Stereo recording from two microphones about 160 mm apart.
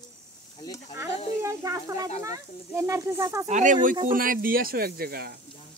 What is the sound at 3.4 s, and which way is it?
Speech, 50° right (ahead or behind).